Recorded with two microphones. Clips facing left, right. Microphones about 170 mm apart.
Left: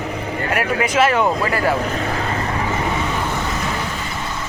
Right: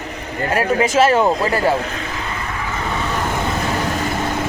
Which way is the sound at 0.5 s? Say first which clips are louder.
Right 3 dB; 30° right (ahead or behind).